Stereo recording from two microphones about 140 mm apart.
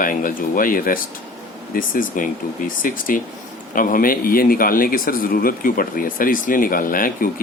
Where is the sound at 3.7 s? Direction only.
85° left.